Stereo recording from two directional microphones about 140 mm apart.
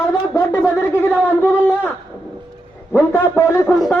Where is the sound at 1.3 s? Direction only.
15° left (ahead or behind).